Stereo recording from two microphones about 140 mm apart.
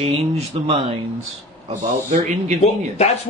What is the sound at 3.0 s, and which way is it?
Speech, 50° left (ahead or behind).